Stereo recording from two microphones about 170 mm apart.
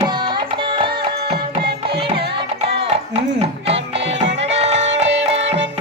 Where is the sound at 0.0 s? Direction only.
25° right (ahead or behind).